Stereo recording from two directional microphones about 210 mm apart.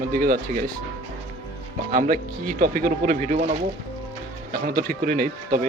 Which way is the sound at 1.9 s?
40° right (ahead or behind).